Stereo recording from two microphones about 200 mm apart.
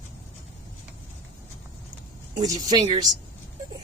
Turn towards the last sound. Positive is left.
turn(degrees=-20)  # may be behind; listen again after turning